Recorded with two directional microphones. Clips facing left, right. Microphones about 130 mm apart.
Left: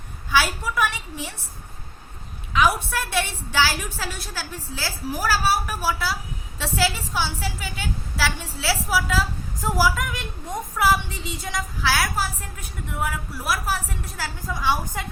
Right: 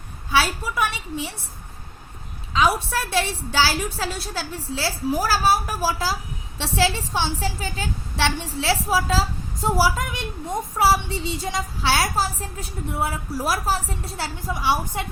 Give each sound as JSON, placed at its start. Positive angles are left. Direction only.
{"t": 0.3, "sound": "a woman's voice", "side_deg": -25}
{"t": 2.5, "sound": "a woman's voice", "side_deg": -25}
{"t": 14.2, "sound": "a woman's voice", "side_deg": -25}